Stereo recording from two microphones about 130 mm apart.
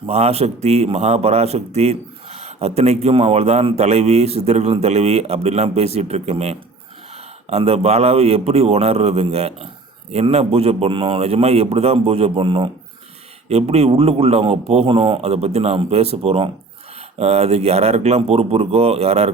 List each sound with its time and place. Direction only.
0.0 s a man's voice: 55° right (ahead or behind)